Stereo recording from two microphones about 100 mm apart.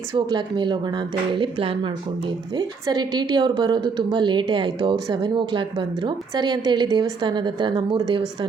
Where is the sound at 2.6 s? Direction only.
40° right (ahead or behind).